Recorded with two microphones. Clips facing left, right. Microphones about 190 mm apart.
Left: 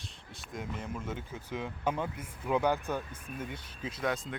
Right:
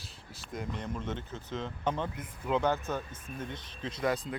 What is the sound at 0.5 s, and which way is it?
Speech, centre (ahead or behind).